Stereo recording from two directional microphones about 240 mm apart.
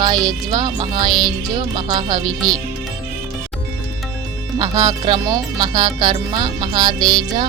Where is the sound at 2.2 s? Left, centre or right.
Centre.